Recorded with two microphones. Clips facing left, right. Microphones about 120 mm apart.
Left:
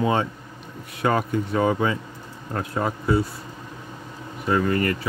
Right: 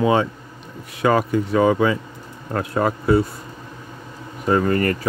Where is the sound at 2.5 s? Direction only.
75° right (ahead or behind).